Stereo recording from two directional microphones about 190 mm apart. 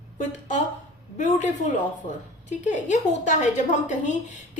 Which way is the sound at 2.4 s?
40° left (ahead or behind).